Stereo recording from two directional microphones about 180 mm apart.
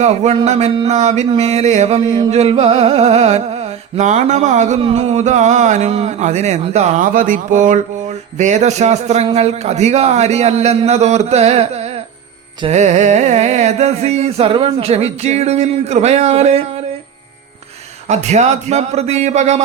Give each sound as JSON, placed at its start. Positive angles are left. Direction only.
{"t": 0.0, "sound": "music", "side_deg": -40}
{"t": 18.1, "sound": "music", "side_deg": -40}